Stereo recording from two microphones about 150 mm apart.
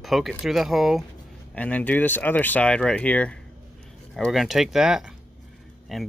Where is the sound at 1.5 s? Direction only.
10° left (ahead or behind).